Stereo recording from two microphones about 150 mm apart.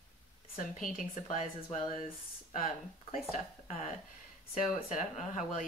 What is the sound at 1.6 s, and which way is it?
Speech, 50° left (ahead or behind).